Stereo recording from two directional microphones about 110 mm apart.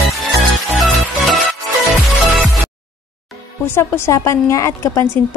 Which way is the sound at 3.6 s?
20° left (ahead or behind).